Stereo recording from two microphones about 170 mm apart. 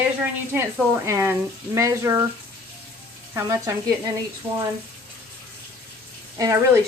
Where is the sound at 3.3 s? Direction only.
15° right (ahead or behind).